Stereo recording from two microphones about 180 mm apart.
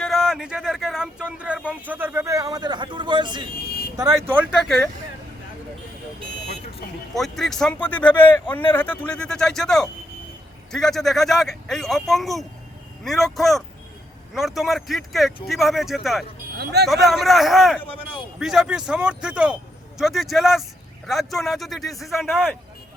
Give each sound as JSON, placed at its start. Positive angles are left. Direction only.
{"t": 0.0, "sound": "speech", "side_deg": 0}
{"t": 4.5, "sound": "speech", "side_deg": 0}
{"t": 7.1, "sound": "speech", "side_deg": 0}